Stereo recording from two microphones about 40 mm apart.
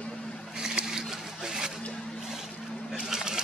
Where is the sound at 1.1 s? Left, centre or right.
Centre.